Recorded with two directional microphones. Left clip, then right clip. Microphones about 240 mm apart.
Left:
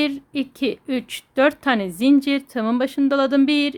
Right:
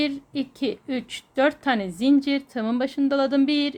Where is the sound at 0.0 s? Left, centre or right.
Centre.